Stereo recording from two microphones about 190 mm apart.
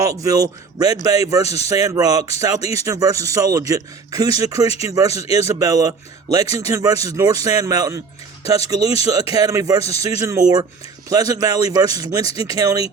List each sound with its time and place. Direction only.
0.0 s speech: 15° right (ahead or behind)
1.5 s speech: 35° left (ahead or behind)
1.7 s a man's voice: 20° right (ahead or behind)